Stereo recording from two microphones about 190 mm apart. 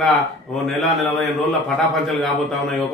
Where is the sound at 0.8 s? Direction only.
Centre (ahead or behind).